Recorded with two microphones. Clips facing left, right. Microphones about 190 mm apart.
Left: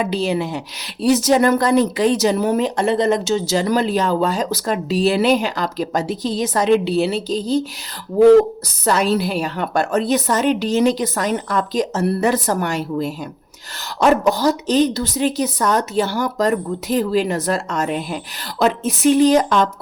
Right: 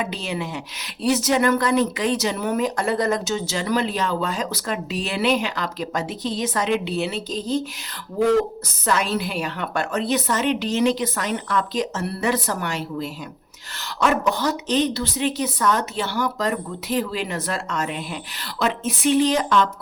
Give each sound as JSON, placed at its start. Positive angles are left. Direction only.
{"t": 0.0, "sound": "speech", "side_deg": 35}
{"t": 8.6, "sound": "speech", "side_deg": 35}